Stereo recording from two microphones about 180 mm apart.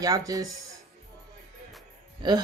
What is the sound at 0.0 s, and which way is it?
Speech, 20° right (ahead or behind).